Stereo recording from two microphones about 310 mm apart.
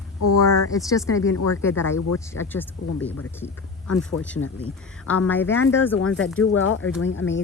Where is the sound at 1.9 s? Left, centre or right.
Left.